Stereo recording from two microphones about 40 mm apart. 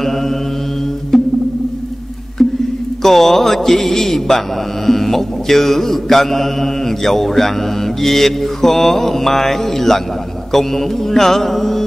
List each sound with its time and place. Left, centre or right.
1.1 s music: centre
3.0 s mantra: centre